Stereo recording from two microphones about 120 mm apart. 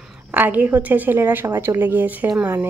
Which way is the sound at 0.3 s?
15° right (ahead or behind).